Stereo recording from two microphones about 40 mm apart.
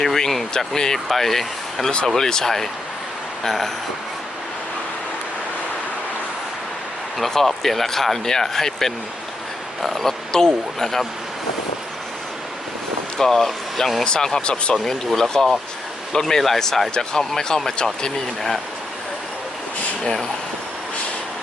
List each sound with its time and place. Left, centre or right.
0.0 s speech: centre
7.2 s speech: centre
13.1 s speech: centre
14.0 s speech: left
14.8 s speech: centre